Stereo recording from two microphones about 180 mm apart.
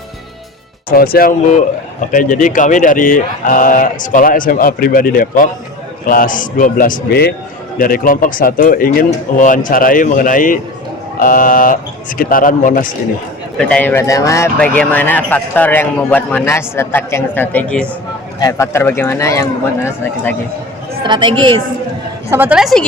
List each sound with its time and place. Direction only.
0.9 s speech: 55° left (ahead or behind)
7.8 s speech: 50° left (ahead or behind)
13.6 s a man's voice: 5° left (ahead or behind)
18.3 s a man's voice: 20° left (ahead or behind)
21.0 s speech: 25° right (ahead or behind)
22.3 s a woman's voice: 10° right (ahead or behind)